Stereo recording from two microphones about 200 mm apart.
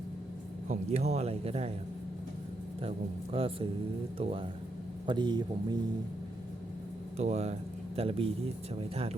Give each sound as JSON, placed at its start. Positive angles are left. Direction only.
{"t": 0.7, "sound": "speech", "side_deg": -35}
{"t": 3.3, "sound": "speech", "side_deg": -30}
{"t": 7.2, "sound": "speech", "side_deg": -30}